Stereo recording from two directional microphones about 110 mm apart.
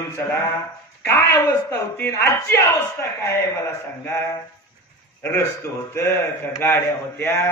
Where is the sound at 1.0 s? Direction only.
20° left (ahead or behind).